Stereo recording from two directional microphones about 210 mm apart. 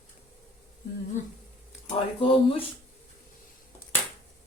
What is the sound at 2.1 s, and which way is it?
Speech, 25° left (ahead or behind).